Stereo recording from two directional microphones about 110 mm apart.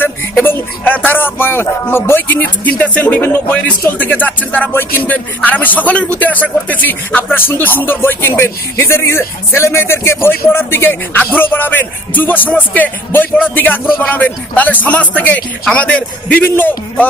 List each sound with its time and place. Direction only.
0.0 s speech: 20° left (ahead or behind)